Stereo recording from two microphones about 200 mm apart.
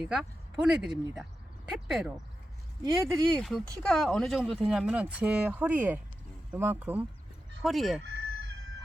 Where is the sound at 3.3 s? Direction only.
Centre (ahead or behind).